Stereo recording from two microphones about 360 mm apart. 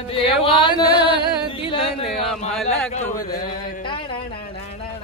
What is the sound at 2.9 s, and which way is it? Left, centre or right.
Speech, left.